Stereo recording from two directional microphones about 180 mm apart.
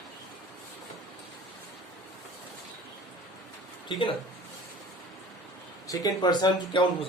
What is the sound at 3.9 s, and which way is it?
Speech, 25° left (ahead or behind).